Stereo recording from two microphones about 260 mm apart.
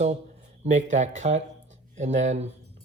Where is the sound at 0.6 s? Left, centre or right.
Right.